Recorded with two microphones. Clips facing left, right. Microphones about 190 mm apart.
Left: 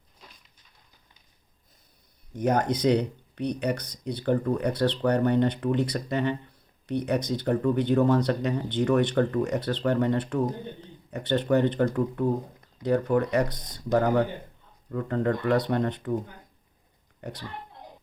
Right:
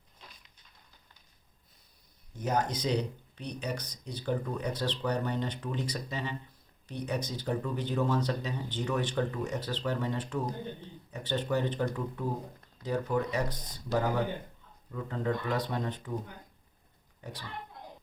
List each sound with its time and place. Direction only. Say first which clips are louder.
2.4 s speech: left 7 dB; 60° left (ahead or behind)
17.2 s speech: left 6 dB; 65° left (ahead or behind)